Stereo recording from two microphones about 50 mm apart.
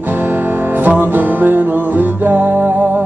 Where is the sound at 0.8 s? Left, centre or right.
Right.